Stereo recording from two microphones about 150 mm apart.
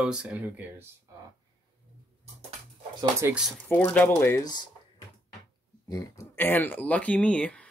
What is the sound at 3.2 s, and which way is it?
Speech, 15° right (ahead or behind).